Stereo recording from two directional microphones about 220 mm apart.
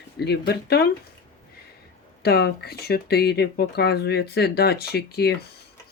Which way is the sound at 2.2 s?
45° left (ahead or behind).